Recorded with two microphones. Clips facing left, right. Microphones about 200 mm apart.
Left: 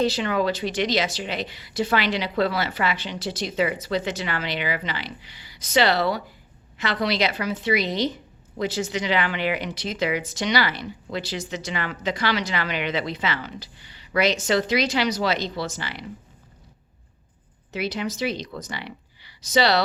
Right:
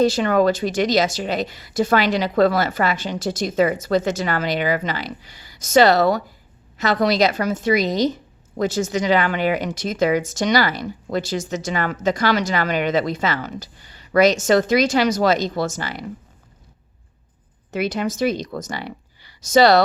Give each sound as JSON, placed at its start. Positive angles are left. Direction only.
{"t": 0.0, "sound": "a woman's voice", "side_deg": -45}
{"t": 17.7, "sound": "speech", "side_deg": -50}